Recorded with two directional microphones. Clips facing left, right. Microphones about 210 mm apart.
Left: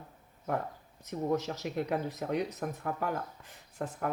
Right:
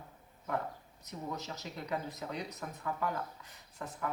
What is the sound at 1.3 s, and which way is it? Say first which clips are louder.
Speech: left 11 dB; 55° left (ahead or behind).